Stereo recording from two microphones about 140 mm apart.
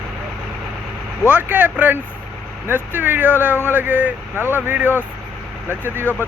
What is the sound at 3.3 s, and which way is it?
Speech, 15° left (ahead or behind).